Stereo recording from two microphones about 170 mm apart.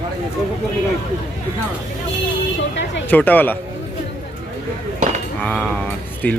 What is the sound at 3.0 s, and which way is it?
Speech, 10° left (ahead or behind).